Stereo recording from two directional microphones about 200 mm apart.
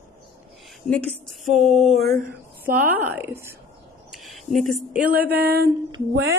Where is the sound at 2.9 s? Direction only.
10° right (ahead or behind).